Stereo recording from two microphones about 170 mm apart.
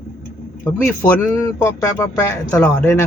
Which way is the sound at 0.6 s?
15° left (ahead or behind).